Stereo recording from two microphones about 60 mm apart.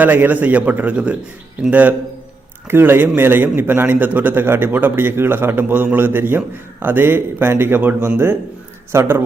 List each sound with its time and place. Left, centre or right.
0.0 s a man's voice: right
2.6 s a man's voice: right